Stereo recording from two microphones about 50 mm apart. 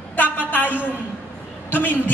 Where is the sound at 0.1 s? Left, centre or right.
Left.